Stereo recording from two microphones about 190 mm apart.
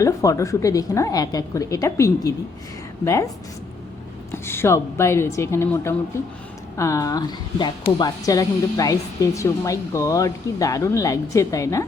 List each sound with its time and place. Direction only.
0.0 s speech: 15° left (ahead or behind)
4.3 s speech: 15° left (ahead or behind)